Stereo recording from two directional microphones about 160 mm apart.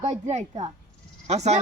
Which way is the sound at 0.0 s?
45° right (ahead or behind).